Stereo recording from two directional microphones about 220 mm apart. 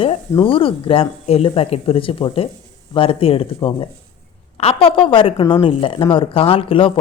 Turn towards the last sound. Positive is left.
turn(degrees=25)  # may be behind; listen again after turning